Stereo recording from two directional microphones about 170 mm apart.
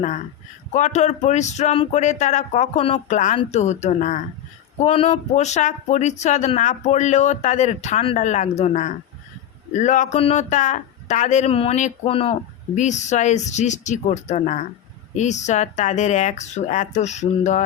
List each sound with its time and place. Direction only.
0.7 s speech: 45° left (ahead or behind)